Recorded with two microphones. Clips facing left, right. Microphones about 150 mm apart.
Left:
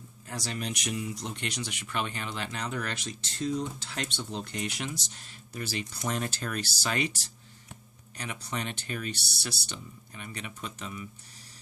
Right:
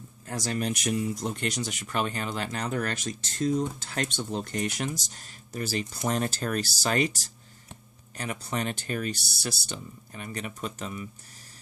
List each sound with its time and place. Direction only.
0.3 s speech: 45° right (ahead or behind)